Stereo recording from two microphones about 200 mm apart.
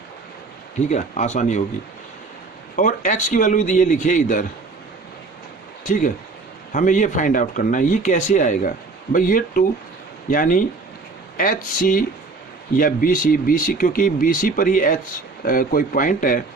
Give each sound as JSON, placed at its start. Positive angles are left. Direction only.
{"t": 0.9, "sound": "speech", "side_deg": 35}
{"t": 2.7, "sound": "speech", "side_deg": 40}
{"t": 5.8, "sound": "speech", "side_deg": 40}